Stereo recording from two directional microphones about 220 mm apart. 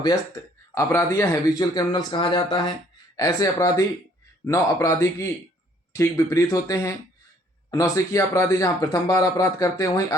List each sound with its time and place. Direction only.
0.7 s a man's voice: 10° left (ahead or behind)